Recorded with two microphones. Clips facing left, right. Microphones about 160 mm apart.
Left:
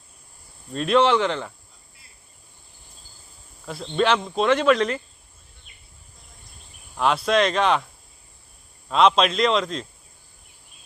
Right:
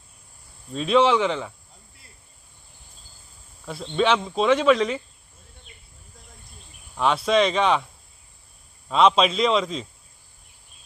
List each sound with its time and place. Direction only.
0.7 s speech: centre (ahead or behind)
3.7 s speech: centre (ahead or behind)
6.9 s speech: centre (ahead or behind)
8.9 s speech: centre (ahead or behind)